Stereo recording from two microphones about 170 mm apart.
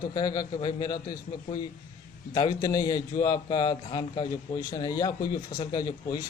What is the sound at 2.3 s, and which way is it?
Speech, 25° left (ahead or behind).